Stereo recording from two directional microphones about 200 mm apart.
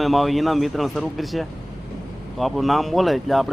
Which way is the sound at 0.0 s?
Centre (ahead or behind).